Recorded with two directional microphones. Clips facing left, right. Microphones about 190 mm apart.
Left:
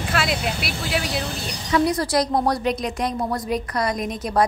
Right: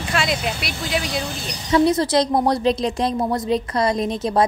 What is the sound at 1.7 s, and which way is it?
A woman's voice, 25° right (ahead or behind).